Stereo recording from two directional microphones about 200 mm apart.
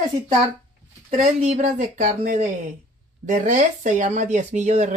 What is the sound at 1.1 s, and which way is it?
Speech, 35° right (ahead or behind).